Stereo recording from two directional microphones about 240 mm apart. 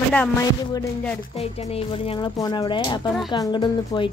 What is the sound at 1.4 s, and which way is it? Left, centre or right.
Speech, left.